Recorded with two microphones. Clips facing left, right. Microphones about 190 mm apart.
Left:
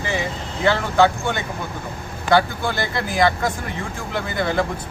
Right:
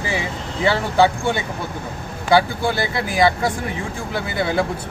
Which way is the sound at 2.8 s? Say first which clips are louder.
Even; 10° right (ahead or behind).